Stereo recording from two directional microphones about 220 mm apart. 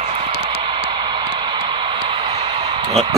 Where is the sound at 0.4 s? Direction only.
25° right (ahead or behind).